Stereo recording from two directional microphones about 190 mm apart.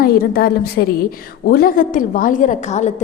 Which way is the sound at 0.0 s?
55° left (ahead or behind).